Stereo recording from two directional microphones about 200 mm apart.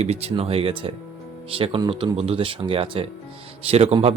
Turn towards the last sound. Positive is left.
turn(degrees=-30)  # may be behind; listen again after turning